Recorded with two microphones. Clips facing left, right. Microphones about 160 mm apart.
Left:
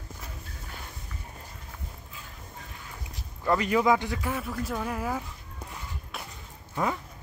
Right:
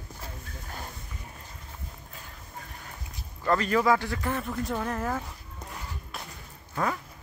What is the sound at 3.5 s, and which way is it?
Speech, 15° left (ahead or behind).